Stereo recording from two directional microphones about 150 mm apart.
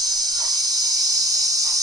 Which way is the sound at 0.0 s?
25° right (ahead or behind).